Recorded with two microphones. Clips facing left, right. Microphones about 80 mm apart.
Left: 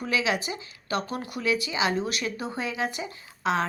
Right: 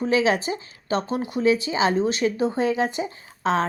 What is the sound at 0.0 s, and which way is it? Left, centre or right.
Speech, right.